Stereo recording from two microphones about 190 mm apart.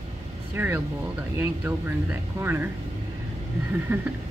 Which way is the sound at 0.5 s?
10° right (ahead or behind).